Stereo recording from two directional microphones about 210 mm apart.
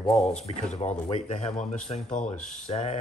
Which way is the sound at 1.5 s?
Centre (ahead or behind).